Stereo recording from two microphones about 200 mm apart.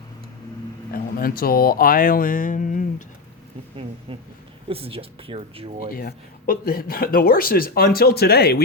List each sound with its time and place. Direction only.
0.9 s speech: 45° left (ahead or behind)
4.7 s speech: 30° right (ahead or behind)
5.9 s speech: 45° left (ahead or behind)